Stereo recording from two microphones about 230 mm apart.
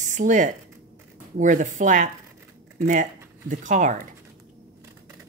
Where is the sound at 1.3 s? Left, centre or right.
Right.